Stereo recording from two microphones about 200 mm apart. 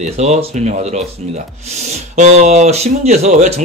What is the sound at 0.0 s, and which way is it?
Speech, 35° right (ahead or behind).